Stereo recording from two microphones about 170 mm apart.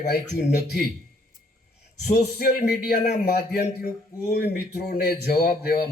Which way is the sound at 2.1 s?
65° left (ahead or behind).